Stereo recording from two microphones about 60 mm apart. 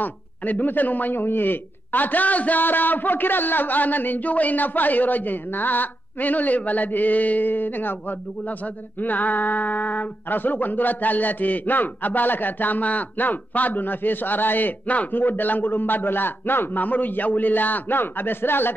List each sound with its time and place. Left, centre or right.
0.0 s speech: left
9.0 s speech: left